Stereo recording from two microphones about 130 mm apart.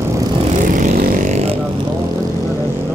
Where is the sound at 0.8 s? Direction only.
75° right (ahead or behind).